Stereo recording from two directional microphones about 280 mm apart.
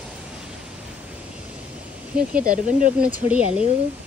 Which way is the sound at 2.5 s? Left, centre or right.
Right.